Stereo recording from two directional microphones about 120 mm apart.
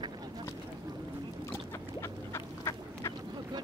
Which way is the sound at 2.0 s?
25° left (ahead or behind).